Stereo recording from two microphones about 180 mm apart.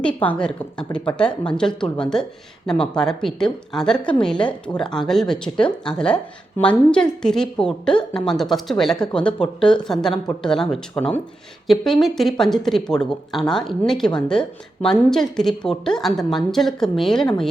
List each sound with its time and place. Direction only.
0.3 s a woman's voice: 5° left (ahead or behind)